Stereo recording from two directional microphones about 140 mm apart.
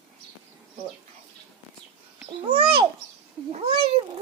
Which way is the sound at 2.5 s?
40° right (ahead or behind).